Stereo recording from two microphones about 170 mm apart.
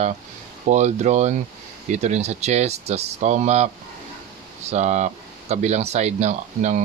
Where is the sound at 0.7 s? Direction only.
45° right (ahead or behind).